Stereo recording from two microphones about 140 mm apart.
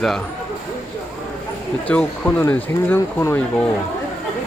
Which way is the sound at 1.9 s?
10° left (ahead or behind).